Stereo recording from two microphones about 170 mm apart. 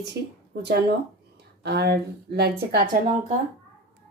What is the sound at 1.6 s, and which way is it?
Speech, 75° right (ahead or behind).